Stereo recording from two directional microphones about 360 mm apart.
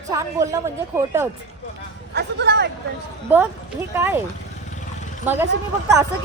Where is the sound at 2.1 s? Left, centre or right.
Right.